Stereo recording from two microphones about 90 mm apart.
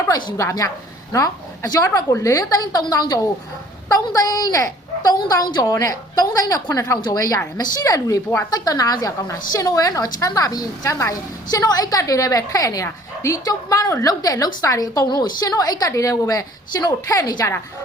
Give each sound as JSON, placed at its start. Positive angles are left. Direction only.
{"t": 0.3, "sound": "a woman's voice", "side_deg": 35}
{"t": 5.6, "sound": "a woman's voice", "side_deg": 40}